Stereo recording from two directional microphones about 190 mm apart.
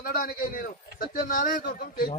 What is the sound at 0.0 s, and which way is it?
A man's voice, 50° left (ahead or behind).